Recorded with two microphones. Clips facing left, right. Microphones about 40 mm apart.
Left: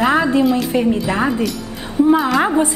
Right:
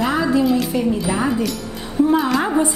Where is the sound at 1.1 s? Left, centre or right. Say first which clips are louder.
Left 2 dB; centre.